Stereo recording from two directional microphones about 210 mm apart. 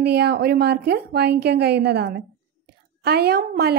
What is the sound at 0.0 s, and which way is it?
A woman's voice, 50° right (ahead or behind).